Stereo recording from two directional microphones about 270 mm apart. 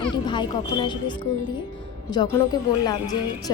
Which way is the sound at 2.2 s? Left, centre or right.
Centre.